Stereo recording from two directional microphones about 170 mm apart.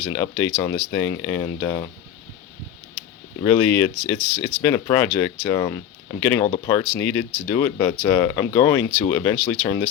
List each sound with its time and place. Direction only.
0.0 s speech: 15° left (ahead or behind)
3.4 s speech: 15° left (ahead or behind)